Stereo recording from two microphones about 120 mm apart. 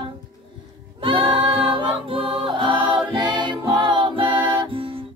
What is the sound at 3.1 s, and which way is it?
Music, 40° right (ahead or behind).